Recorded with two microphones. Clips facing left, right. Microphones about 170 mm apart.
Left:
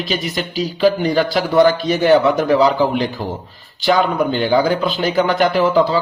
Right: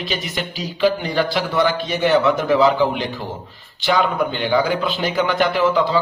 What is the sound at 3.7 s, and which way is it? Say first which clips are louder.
Speech: left 3 dB; 40° left (ahead or behind).